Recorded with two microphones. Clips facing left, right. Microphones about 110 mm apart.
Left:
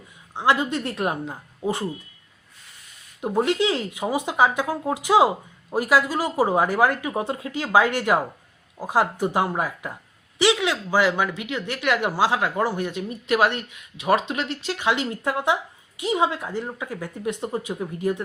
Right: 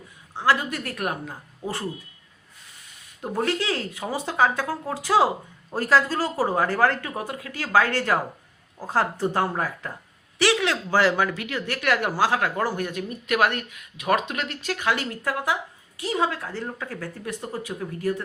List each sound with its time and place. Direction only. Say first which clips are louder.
0.3 s speech: left 2 dB; 20° left (ahead or behind)
3.2 s speech: left 4 dB; 20° left (ahead or behind)